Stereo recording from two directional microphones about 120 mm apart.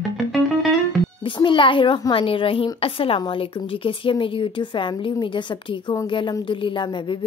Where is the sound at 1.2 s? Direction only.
45° left (ahead or behind).